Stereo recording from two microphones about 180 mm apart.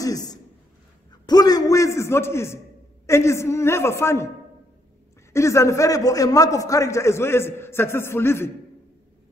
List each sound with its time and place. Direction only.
0.0 s a sound: 20° left (ahead or behind)
1.2 s a man's voice: 20° left (ahead or behind)
5.3 s a man's voice: 15° left (ahead or behind)